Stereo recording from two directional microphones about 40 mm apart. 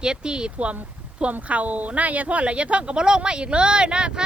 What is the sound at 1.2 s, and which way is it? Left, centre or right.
Speech, right.